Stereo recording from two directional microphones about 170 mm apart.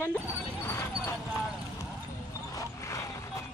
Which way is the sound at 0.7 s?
15° left (ahead or behind).